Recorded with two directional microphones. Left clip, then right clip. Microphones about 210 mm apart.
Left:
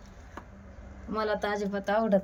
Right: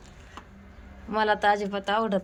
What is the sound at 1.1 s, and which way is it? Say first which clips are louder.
A woman's voice: right 7 dB; centre (ahead or behind).